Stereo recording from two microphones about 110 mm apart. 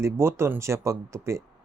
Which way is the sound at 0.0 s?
25° right (ahead or behind).